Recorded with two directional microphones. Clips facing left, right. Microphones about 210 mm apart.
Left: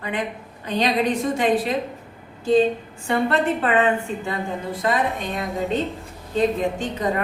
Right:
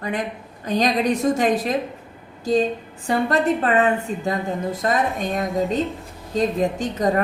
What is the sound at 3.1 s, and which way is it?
A woman's voice, 40° right (ahead or behind).